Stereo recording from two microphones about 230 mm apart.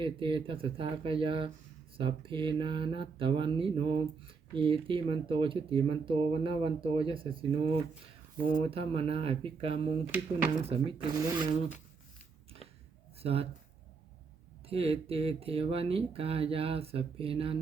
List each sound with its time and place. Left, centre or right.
0.0 s speech: right
8.7 s speech: right
13.2 s speech: right
14.7 s speech: right